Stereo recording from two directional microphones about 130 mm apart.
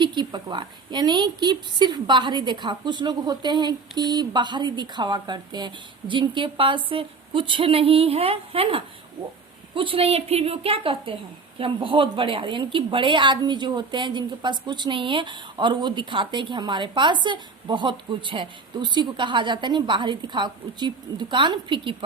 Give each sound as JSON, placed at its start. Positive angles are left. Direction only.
{"t": 0.0, "sound": "a woman's voice", "side_deg": -35}